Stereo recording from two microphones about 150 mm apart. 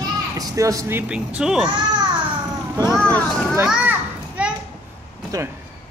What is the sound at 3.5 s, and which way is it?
Children playing, 10° right (ahead or behind).